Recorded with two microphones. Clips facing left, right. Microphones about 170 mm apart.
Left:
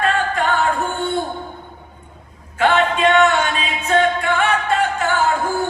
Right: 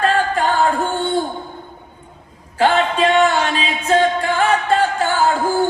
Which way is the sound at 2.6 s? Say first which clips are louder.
Right 1 dB; 35° right (ahead or behind).